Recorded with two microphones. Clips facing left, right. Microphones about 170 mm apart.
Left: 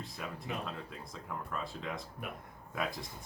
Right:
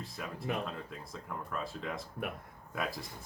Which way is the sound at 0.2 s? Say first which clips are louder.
Right 1 dB; centre (ahead or behind).